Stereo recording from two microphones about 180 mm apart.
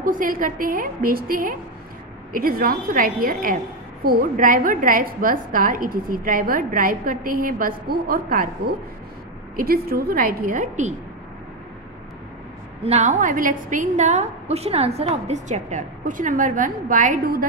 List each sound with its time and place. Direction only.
0.0 s a woman's voice: 50° right (ahead or behind)
12.8 s a woman's voice: 40° right (ahead or behind)